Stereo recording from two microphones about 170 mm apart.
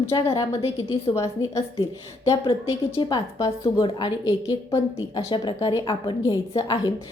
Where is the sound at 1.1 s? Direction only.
15° left (ahead or behind).